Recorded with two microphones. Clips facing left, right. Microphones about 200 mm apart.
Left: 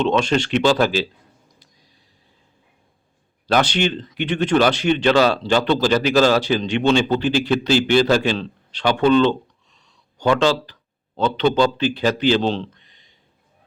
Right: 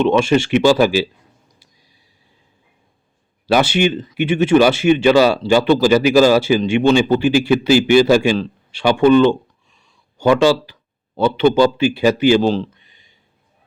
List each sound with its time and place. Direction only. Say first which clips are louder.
0.0 s speech: right 4 dB; 10° right (ahead or behind)
3.4 s speech: right 4 dB; 10° right (ahead or behind)